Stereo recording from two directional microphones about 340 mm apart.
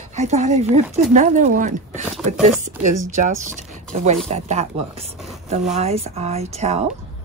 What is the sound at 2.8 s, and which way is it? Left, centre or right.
Speech, right.